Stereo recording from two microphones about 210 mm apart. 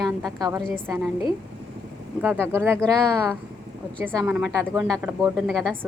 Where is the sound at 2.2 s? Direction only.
10° right (ahead or behind).